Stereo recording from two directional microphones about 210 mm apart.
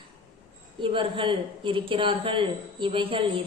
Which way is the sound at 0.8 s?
25° right (ahead or behind).